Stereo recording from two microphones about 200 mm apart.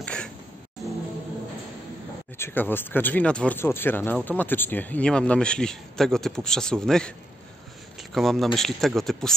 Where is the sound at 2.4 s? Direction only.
10° left (ahead or behind).